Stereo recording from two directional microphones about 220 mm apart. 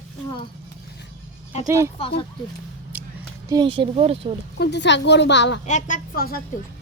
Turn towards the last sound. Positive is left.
turn(degrees=40)  # may be behind; listen again after turning